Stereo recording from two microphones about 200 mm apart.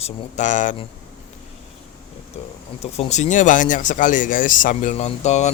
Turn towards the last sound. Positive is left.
turn(degrees=35)  # may be behind; listen again after turning